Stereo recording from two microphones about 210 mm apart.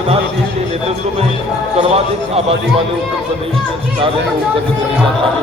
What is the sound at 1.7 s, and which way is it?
Speech, 30° right (ahead or behind).